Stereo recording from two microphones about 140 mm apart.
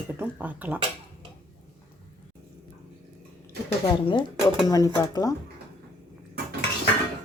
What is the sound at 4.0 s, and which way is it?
Speech, 35° left (ahead or behind).